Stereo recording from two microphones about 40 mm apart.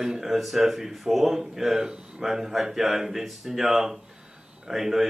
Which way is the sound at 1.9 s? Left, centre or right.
Right.